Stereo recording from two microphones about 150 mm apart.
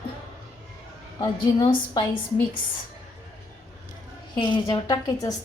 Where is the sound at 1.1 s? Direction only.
25° left (ahead or behind).